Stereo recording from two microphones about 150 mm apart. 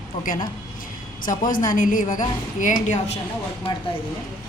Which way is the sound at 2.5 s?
55° left (ahead or behind).